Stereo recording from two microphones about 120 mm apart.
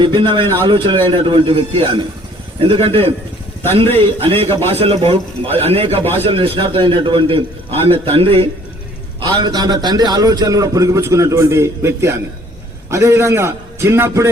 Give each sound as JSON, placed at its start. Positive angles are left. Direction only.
{"t": 0.0, "sound": "a man's voice", "side_deg": -40}
{"t": 0.4, "sound": "speech", "side_deg": 20}
{"t": 0.7, "sound": "a man's voice", "side_deg": -45}
{"t": 9.2, "sound": "a man's voice", "side_deg": -35}